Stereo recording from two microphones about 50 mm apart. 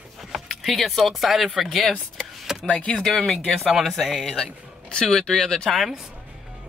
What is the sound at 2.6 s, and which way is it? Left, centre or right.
Speech, left.